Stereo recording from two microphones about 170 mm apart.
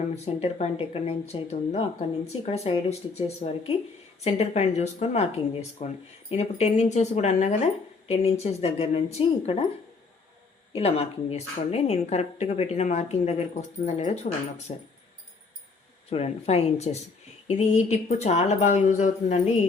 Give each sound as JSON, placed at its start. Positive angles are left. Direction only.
{"t": 0.3, "sound": "a woman's voice", "side_deg": 40}
{"t": 10.8, "sound": "a woman's voice", "side_deg": 35}
{"t": 16.0, "sound": "a woman's voice", "side_deg": 35}